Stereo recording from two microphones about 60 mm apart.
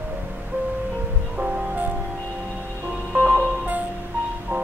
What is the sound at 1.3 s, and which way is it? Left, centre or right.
Music, right.